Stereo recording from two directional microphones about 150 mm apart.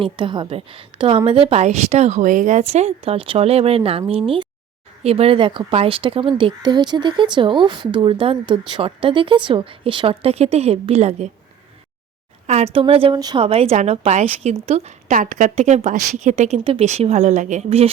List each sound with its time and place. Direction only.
0.0 s speech: 35° right (ahead or behind)
12.5 s speech: 45° right (ahead or behind); by 15.5 s 60° right (ahead or behind)
15.5 s speech: 50° right (ahead or behind)